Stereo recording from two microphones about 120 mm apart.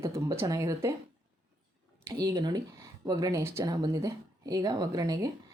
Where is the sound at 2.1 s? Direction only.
35° right (ahead or behind).